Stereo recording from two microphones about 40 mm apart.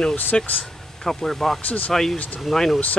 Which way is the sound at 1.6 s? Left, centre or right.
Left.